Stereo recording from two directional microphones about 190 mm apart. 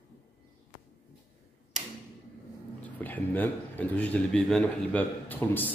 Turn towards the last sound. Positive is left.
turn(degrees=10)  # may be behind; listen again after turning